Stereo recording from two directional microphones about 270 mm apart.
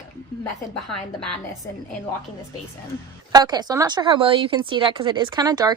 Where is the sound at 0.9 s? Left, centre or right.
Centre.